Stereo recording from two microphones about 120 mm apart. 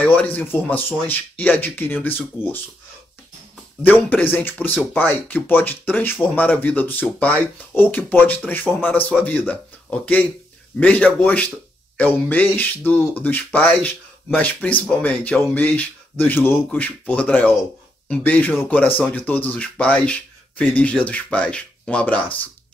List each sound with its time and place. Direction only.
0.0 s speech: 15° left (ahead or behind)
3.8 s speech: 15° left (ahead or behind)